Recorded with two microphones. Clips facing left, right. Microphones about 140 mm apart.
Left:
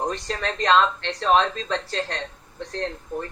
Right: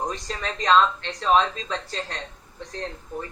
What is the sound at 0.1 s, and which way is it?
Speech, 65° left (ahead or behind).